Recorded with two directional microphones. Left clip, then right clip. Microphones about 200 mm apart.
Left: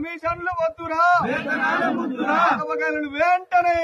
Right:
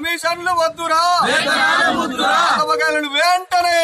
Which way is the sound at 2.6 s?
10° right (ahead or behind).